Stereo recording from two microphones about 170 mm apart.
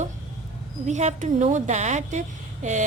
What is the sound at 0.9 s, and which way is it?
Speech, 45° right (ahead or behind).